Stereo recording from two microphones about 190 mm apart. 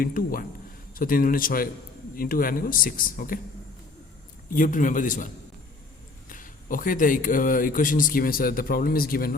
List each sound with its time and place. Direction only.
0.0 s speech: 50° left (ahead or behind)
4.4 s speech: 45° left (ahead or behind)